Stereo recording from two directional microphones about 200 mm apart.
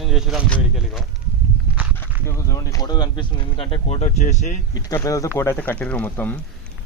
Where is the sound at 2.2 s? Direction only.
15° left (ahead or behind); by 4.5 s 35° left (ahead or behind).